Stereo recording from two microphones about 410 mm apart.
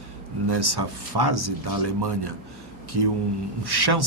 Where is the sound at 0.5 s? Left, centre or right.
Right.